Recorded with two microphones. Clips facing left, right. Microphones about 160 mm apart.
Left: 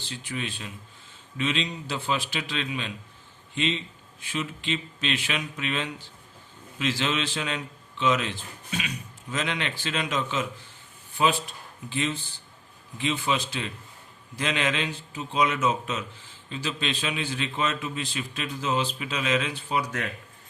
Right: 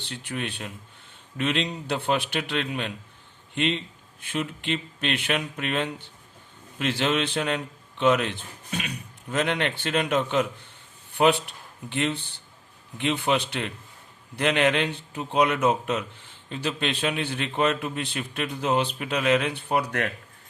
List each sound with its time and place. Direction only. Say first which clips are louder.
0.0 s speech: right 2 dB; 60° right (ahead or behind)